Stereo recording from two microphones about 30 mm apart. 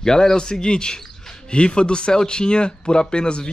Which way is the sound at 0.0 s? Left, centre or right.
Centre.